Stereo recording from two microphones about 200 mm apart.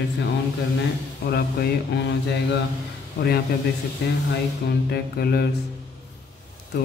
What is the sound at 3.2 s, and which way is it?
A man's voice, 55° left (ahead or behind).